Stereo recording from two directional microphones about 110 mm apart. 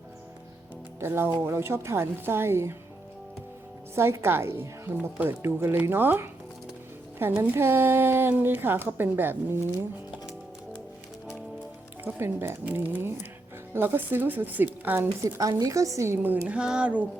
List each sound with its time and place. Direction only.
0.9 s speech: 25° right (ahead or behind)
3.9 s speech: 25° right (ahead or behind)
12.0 s speech: 20° right (ahead or behind)
15.4 s speech: 30° right (ahead or behind); by 17.1 s 10° right (ahead or behind)